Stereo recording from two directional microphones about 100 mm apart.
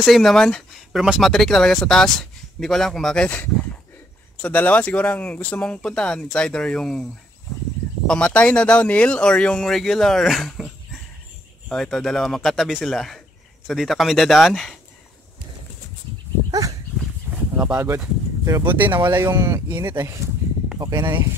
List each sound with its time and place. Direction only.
0.0 s speech: centre (ahead or behind)
8.1 s speech: 10° left (ahead or behind)
17.3 s a sound: 10° right (ahead or behind)
17.7 s speech: 30° right (ahead or behind)
18.6 s speech: 55° right (ahead or behind)
19.1 s speech: 30° right (ahead or behind)